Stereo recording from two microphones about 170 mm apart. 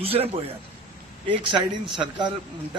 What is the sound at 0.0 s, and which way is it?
A man's voice, 35° right (ahead or behind).